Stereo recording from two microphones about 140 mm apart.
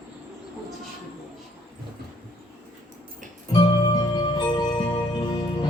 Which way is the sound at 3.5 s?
30° left (ahead or behind).